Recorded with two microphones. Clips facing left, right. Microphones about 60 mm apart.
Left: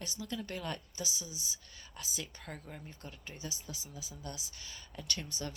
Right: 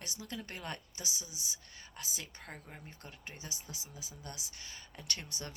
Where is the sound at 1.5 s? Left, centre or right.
Right.